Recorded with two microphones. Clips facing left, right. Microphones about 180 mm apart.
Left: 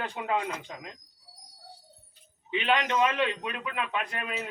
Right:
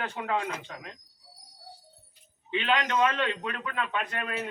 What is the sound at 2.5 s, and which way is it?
A man's voice, 15° left (ahead or behind).